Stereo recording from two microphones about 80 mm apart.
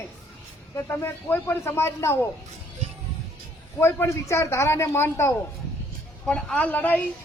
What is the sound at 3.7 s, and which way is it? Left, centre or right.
Speech, left.